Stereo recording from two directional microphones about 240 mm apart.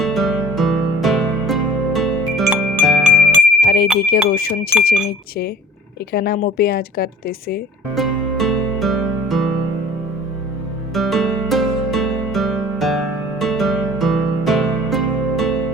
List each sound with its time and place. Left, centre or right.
0.0 s music: centre
3.7 s speech: left
6.1 s speech: left
7.9 s music: centre
10.9 s music: centre